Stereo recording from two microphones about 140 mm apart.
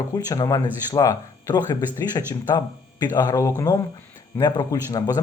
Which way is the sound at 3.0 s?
30° left (ahead or behind).